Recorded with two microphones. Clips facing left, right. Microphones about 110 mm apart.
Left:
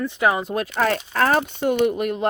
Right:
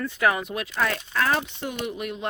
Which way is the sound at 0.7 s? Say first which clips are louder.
Left 4 dB; 45° left (ahead or behind).